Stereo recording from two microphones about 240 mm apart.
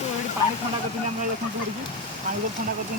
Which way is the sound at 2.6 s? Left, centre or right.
Right.